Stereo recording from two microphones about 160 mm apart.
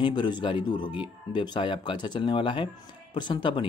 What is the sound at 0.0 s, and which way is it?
Speech, 30° left (ahead or behind).